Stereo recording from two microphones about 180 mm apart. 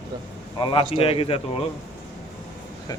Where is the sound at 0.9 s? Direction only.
30° left (ahead or behind).